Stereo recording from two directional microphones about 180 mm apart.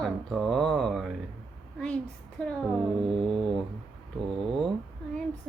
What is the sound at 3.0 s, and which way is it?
Mantra, 30° right (ahead or behind).